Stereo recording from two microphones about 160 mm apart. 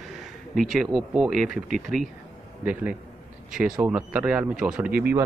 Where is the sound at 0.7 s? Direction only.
5° right (ahead or behind).